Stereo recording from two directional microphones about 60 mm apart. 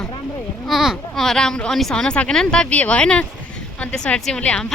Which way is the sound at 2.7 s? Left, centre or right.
Left.